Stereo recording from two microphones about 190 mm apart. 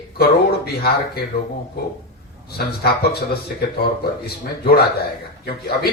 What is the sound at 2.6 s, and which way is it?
A man's voice, 55° left (ahead or behind).